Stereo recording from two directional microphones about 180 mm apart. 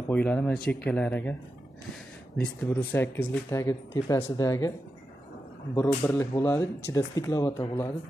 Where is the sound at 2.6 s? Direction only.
10° left (ahead or behind).